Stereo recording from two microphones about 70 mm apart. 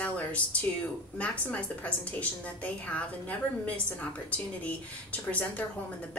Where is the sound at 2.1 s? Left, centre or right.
Centre.